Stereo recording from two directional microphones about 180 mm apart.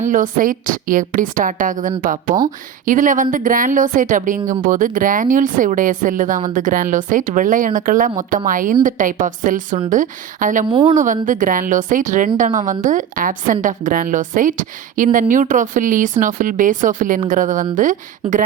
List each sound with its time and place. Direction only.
0.1 s speech: 50° right (ahead or behind)
10.7 s speech: 25° right (ahead or behind)
10.9 s speech: 45° right (ahead or behind)